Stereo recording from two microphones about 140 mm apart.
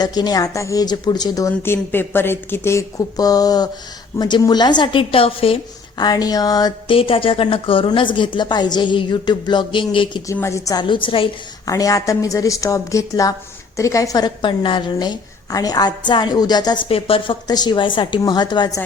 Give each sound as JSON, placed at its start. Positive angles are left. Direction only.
{"t": 0.0, "sound": "a woman's voice", "side_deg": 30}
{"t": 6.0, "sound": "a woman's voice", "side_deg": 30}
{"t": 10.3, "sound": "a woman's voice", "side_deg": 20}
{"t": 10.8, "sound": "a woman's voice", "side_deg": 35}
{"t": 11.6, "sound": "a woman's voice", "side_deg": 25}